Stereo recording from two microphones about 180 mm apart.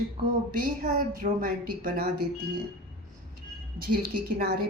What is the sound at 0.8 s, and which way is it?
A woman's voice, 50° right (ahead or behind).